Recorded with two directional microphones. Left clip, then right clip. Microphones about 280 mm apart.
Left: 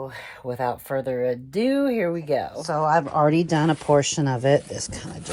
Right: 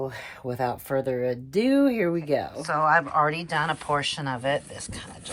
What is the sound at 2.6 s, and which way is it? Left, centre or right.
Speech, centre.